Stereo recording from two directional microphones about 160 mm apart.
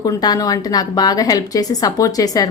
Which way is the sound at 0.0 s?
25° left (ahead or behind).